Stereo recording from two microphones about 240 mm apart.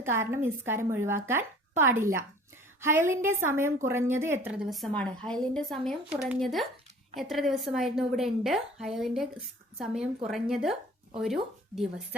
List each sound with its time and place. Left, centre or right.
0.0 s a woman's voice: centre